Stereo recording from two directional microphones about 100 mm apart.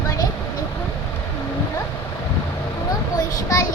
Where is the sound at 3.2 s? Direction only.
35° left (ahead or behind).